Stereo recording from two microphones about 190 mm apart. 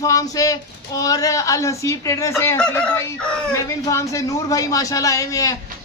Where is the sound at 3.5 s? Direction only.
15° left (ahead or behind).